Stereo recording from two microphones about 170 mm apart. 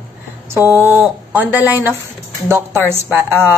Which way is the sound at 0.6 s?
10° right (ahead or behind).